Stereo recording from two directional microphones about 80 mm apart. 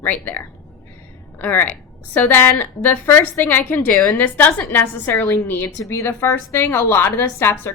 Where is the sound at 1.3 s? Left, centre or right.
Left.